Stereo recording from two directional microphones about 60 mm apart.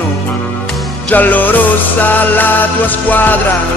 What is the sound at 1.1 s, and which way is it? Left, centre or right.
Music, left.